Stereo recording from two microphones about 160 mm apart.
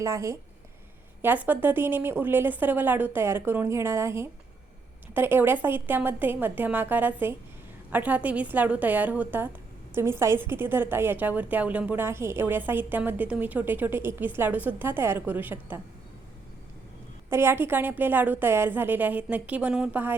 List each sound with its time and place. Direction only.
0.0 s a woman's voice: 20° right (ahead or behind)
17.2 s a woman's voice: 15° right (ahead or behind)